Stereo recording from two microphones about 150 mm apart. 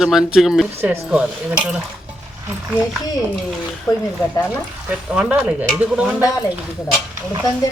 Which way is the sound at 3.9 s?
20° left (ahead or behind).